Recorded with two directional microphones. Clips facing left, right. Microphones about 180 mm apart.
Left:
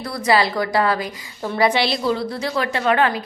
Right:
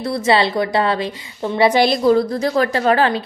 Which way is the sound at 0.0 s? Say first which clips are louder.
Right 2 dB; 25° right (ahead or behind).